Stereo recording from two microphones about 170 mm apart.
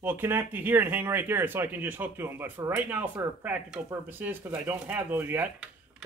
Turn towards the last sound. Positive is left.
turn(degrees=-10)  # may be behind; listen again after turning